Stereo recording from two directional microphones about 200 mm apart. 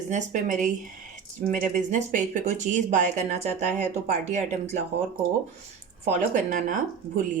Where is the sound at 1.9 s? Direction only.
40° right (ahead or behind).